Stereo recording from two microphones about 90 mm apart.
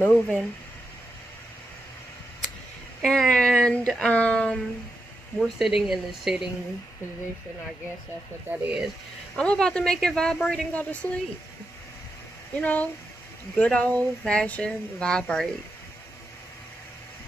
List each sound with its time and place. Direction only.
0.0 s speech: 15° left (ahead or behind)
3.0 s speech: 5° left (ahead or behind)
5.4 s speech: 5° right (ahead or behind)
8.5 s speech: 15° right (ahead or behind)
9.4 s speech: 10° left (ahead or behind)
12.5 s speech: 15° left (ahead or behind)